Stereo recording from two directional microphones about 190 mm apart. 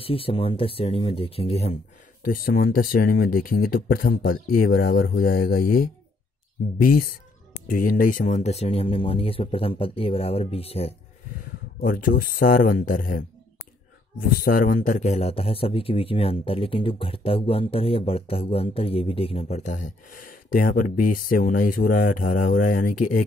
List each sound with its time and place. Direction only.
0.0 s speech: 30° left (ahead or behind)
2.2 s a man's voice: 50° left (ahead or behind); by 11.0 s 30° left (ahead or behind)
11.3 s speech: 45° left (ahead or behind)
14.2 s a man's voice: 45° left (ahead or behind)